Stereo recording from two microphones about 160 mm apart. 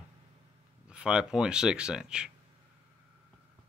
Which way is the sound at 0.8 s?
5° right (ahead or behind).